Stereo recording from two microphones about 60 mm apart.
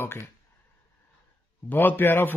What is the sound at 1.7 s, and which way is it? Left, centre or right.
Speech, left.